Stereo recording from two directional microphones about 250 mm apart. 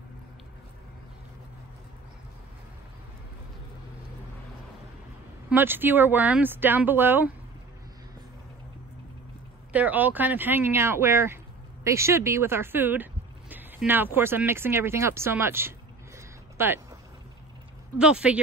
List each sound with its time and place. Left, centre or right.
5.5 s speech: centre
9.7 s speech: centre
16.2 s a sound: centre
17.9 s speech: centre